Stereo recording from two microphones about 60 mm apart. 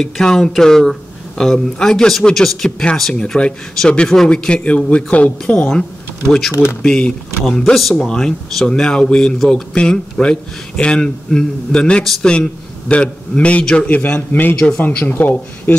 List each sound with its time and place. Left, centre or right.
0.0 s a man's voice: centre
3.2 s a man's voice: centre
6.5 s speech: left
6.8 s a man's voice: centre
7.7 s a man's voice: centre; by 15.7 s left